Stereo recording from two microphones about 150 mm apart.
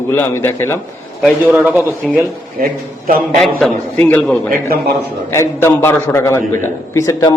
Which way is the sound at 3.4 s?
5° left (ahead or behind).